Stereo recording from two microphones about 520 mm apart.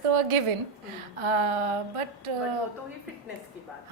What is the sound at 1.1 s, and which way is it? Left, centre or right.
Speech, right.